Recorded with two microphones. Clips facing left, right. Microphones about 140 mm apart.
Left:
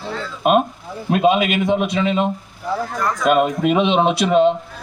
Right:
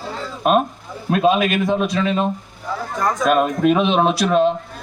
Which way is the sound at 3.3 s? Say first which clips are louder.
Even; 10° left (ahead or behind).